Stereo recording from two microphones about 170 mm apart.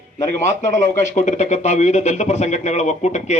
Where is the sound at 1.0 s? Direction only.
45° left (ahead or behind).